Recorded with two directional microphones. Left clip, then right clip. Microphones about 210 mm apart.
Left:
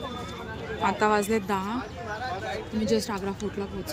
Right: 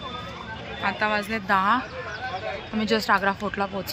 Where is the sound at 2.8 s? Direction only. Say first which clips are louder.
Right 6 dB; 5° left (ahead or behind).